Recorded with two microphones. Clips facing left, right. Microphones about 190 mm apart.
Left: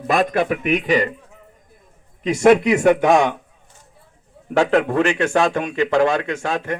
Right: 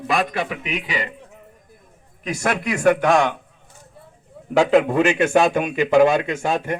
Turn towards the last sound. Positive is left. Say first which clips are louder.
# right 1 dB
turn(degrees=-5)  # may be behind; listen again after turning